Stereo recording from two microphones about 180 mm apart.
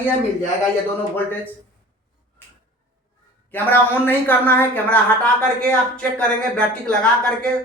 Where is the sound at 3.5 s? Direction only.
10° left (ahead or behind).